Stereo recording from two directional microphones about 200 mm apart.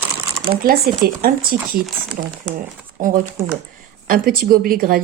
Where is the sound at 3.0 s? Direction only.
45° right (ahead or behind).